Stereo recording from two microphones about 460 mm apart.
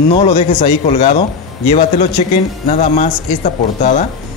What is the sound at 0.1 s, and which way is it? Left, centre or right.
Speech, centre.